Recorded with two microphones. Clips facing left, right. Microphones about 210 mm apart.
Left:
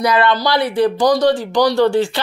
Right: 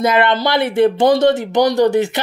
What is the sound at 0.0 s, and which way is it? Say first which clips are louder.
Speech: right 1 dB; 25° right (ahead or behind).